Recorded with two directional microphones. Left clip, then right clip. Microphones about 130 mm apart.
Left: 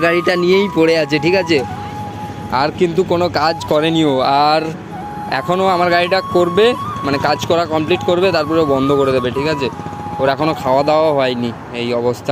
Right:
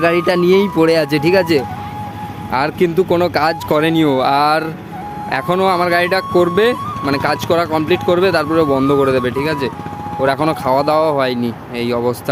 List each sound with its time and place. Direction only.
0.0 s speech: 15° right (ahead or behind)
10.4 s speech: 40° right (ahead or behind)